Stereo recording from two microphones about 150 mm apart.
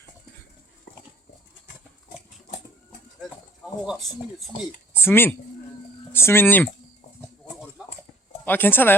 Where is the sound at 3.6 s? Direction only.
Centre (ahead or behind).